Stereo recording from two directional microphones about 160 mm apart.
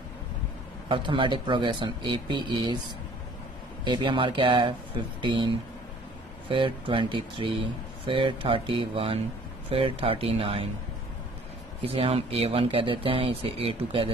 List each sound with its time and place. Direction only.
0.8 s speech: 30° right (ahead or behind)
3.8 s speech: 30° right (ahead or behind)
11.8 s speech: 35° right (ahead or behind)